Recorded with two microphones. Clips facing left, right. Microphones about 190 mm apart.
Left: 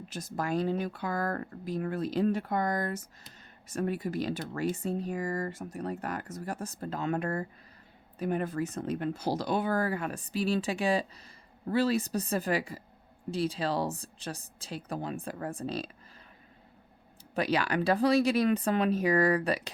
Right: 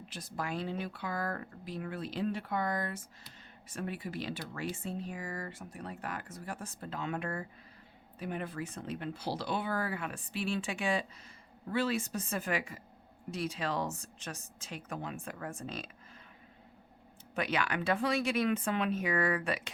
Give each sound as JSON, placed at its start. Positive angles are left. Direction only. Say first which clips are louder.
{"t": 0.0, "sound": "speech", "louder": "left 5 dB", "side_deg": 45}
{"t": 17.3, "sound": "speech", "louder": "left 5 dB", "side_deg": 35}